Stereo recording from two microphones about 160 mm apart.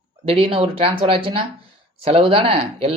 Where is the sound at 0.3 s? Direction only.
35° right (ahead or behind).